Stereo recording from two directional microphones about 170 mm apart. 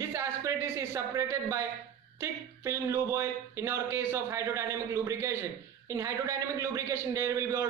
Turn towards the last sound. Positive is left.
turn(degrees=-15)  # may be behind; listen again after turning